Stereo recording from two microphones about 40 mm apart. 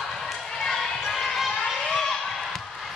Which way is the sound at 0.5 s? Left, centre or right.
Centre.